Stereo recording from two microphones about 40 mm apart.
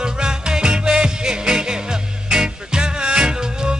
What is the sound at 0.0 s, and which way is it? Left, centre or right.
Music, centre.